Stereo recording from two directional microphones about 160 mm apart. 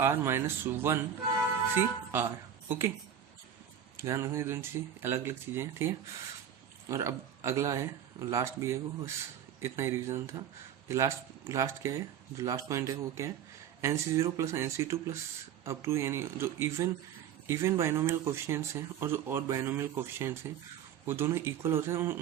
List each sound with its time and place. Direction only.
0.0 s speech: 15° right (ahead or behind)
3.9 s speech: 15° right (ahead or behind)